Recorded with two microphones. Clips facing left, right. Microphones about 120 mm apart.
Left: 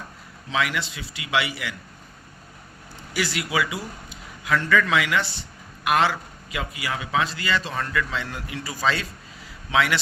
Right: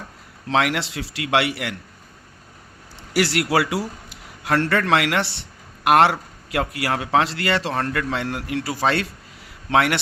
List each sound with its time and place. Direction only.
0.5 s a man's voice: 70° right (ahead or behind)
3.1 s a man's voice: 80° right; by 10.0 s 60° right (ahead or behind)